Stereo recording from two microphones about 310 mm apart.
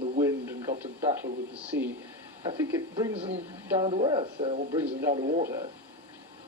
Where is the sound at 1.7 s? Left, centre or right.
Centre; by 5.5 s right.